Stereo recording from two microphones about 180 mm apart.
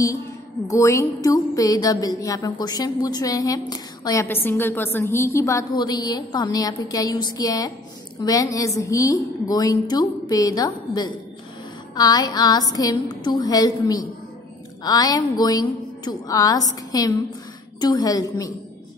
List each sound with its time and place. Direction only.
0.7 s speech: 15° left (ahead or behind)